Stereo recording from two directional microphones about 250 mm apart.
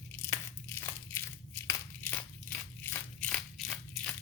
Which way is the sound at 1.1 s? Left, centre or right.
Centre.